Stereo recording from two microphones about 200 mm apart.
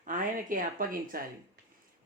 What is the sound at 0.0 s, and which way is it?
Speech, 40° right (ahead or behind).